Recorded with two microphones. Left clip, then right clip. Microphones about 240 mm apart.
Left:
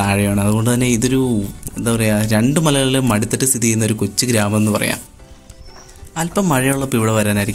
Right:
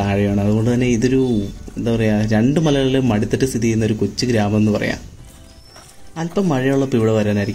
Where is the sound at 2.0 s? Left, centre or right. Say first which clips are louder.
Left 1 dB; centre.